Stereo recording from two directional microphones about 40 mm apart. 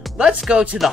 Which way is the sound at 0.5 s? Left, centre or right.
Right.